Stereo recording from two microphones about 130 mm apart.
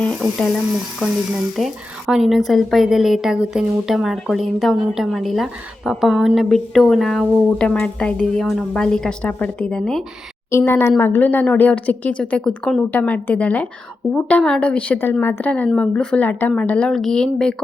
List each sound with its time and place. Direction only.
0.3 s speech: 5° right (ahead or behind)
10.5 s a woman's voice: 20° left (ahead or behind); by 17.5 s 5° left (ahead or behind)